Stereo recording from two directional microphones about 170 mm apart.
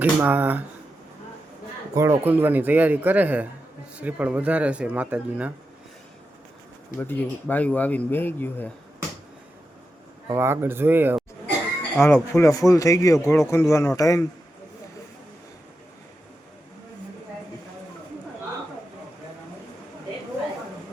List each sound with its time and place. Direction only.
0.0 s speech: 10° right (ahead or behind)
2.0 s speech: 15° right (ahead or behind)
7.0 s a man's voice: 10° left (ahead or behind)
10.2 s speech: 15° right (ahead or behind)
11.9 s a man's voice: 15° left (ahead or behind)